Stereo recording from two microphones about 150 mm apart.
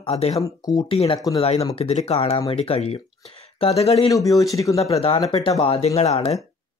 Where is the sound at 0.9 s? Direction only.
35° left (ahead or behind).